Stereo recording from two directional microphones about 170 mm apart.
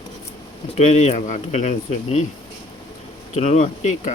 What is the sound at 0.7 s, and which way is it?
Speech, 40° left (ahead or behind).